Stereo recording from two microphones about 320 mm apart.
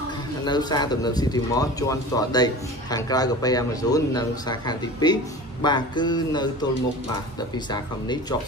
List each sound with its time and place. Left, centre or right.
0.5 s speech: centre